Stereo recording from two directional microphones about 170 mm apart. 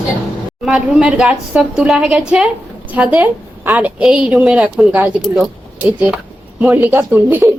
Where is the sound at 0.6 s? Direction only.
5° right (ahead or behind).